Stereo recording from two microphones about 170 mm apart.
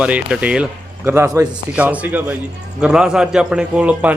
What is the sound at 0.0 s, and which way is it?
A man's voice, 5° right (ahead or behind).